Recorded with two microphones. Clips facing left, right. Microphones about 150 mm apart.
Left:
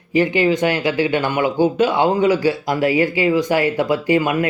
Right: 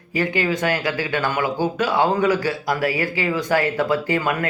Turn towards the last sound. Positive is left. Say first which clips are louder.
# left 5 dB
turn(degrees=20)  # may be behind; listen again after turning